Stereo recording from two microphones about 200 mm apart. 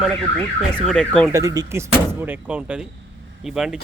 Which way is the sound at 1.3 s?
15° right (ahead or behind).